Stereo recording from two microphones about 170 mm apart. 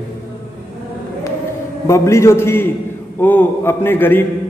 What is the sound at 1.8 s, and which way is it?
A man's voice, 15° left (ahead or behind).